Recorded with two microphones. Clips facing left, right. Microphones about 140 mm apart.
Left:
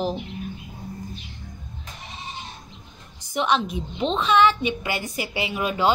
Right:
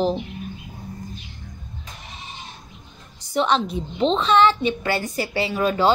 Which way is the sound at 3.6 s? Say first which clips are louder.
Right 4 dB; 35° right (ahead or behind).